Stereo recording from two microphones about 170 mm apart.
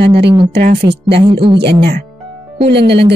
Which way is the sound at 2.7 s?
85° right.